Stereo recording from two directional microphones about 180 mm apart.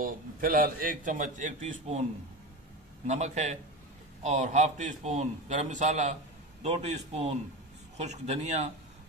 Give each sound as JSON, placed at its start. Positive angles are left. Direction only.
{"t": 0.0, "sound": "a man's voice", "side_deg": -50}
{"t": 3.1, "sound": "a man's voice", "side_deg": -40}